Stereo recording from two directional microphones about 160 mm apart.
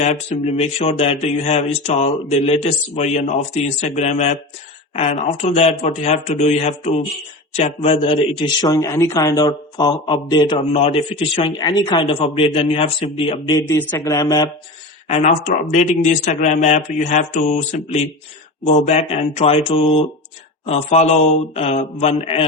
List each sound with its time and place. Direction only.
0.0 s a man's voice: 45° left (ahead or behind)
13.5 s a man's voice: 15° left (ahead or behind)
15.0 s speech: 45° left (ahead or behind)
18.6 s speech: 45° left (ahead or behind)